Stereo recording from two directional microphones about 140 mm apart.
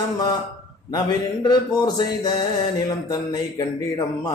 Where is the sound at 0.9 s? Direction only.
30° left (ahead or behind).